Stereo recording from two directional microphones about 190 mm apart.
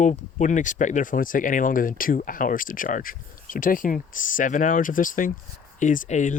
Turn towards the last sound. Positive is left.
turn(degrees=40)  # may be behind; listen again after turning